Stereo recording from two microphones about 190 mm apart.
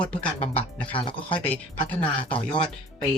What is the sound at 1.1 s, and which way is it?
Speech, 25° left (ahead or behind).